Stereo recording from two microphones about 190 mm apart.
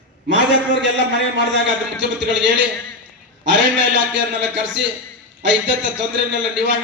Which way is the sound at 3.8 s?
75° right (ahead or behind).